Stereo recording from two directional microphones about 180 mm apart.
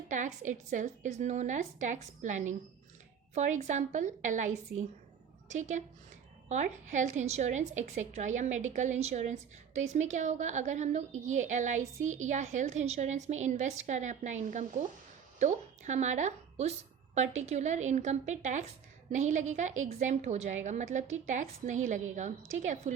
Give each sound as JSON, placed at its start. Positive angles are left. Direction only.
{"t": 0.1, "sound": "a woman's voice", "side_deg": -45}